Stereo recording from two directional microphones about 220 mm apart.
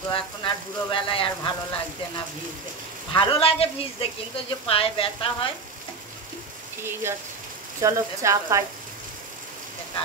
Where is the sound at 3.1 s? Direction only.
25° left (ahead or behind).